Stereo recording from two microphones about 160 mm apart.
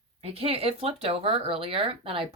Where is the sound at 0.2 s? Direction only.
40° right (ahead or behind).